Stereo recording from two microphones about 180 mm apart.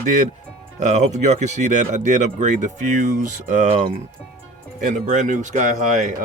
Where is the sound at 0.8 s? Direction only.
40° right (ahead or behind).